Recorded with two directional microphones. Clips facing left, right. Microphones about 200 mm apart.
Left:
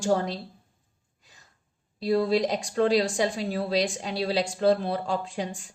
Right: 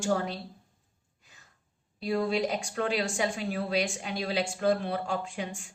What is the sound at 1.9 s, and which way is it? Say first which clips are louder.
A woman's voice: left 5 dB; 35° left (ahead or behind).